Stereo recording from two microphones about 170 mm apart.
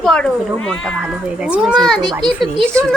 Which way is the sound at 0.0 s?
5° left (ahead or behind).